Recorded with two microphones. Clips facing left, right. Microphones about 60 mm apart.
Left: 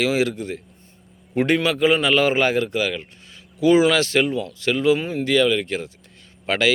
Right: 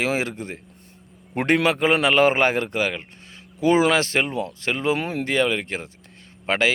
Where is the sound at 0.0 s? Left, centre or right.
Right.